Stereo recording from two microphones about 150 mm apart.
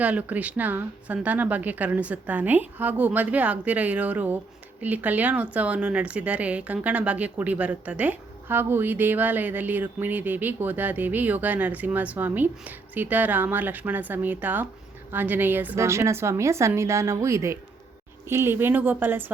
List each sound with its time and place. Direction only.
0.0 s a woman's voice: 10° right (ahead or behind)